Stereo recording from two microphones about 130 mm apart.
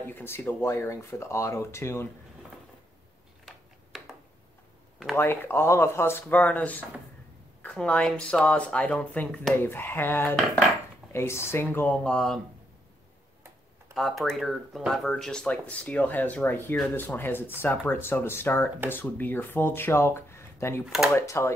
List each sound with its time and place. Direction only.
0.0 s speech: 15° left (ahead or behind)
3.4 s a sound: centre (ahead or behind)
5.1 s speech: 15° left (ahead or behind)
13.9 s speech: centre (ahead or behind); by 20.8 s 20° left (ahead or behind)
20.8 s speech: centre (ahead or behind)
21.1 s speech: 20° left (ahead or behind)